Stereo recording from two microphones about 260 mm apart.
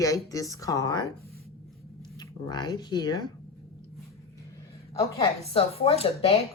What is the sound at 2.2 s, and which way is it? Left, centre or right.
Speech, centre.